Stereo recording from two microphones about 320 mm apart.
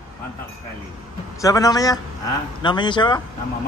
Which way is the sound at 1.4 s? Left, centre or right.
Centre.